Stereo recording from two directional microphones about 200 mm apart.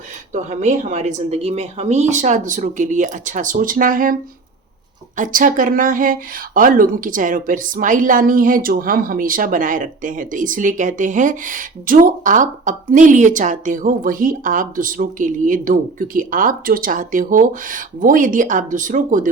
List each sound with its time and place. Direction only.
0.4 s speech: 35° right (ahead or behind)